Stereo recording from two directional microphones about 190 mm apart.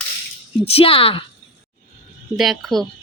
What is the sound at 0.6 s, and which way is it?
Speech, 30° left (ahead or behind).